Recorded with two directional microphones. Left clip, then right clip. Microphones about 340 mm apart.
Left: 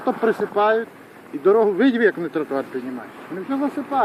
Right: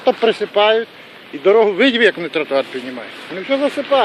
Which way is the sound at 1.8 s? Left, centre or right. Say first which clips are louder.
Right 5 dB; centre.